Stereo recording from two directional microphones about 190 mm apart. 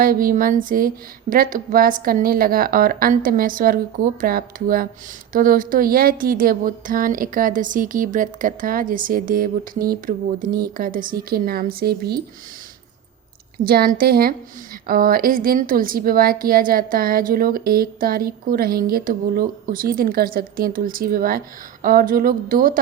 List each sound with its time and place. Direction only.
0.0 s speech: 50° right (ahead or behind)
13.7 s speech: 50° right (ahead or behind)